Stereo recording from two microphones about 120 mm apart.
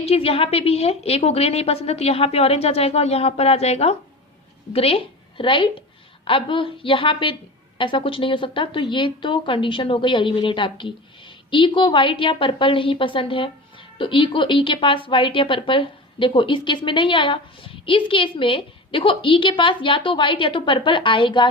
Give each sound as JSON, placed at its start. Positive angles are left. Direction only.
{"t": 0.0, "sound": "a woman's voice", "side_deg": 55}